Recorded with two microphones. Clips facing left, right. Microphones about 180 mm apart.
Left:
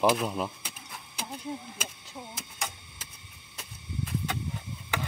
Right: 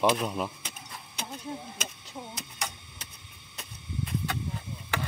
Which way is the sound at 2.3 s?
5° left (ahead or behind).